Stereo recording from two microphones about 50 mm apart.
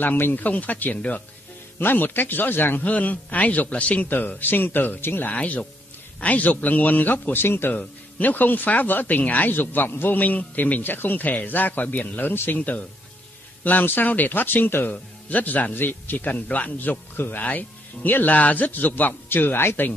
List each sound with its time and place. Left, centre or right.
0.4 s speech: left
2.8 s speech: left
5.3 s speech: left
7.7 s speech: left
15.2 s speech: left
15.7 s speech: left